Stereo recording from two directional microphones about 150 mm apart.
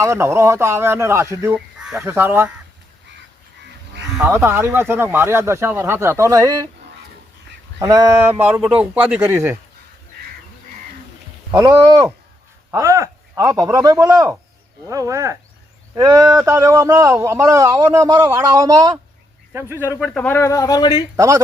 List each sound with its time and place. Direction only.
0.0 s speech: 20° right (ahead or behind)
1.5 s chicken: 5° right (ahead or behind)
2.0 s speech: 15° right (ahead or behind)
4.3 s speech: 15° right (ahead or behind)
7.8 s speech: 20° right (ahead or behind)
11.5 s a man's voice: 20° right (ahead or behind)
20.1 s speech: 15° left (ahead or behind)
21.2 s a man's voice: 20° right (ahead or behind)